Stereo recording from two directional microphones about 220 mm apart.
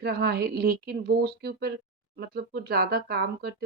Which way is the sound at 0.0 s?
45° right (ahead or behind).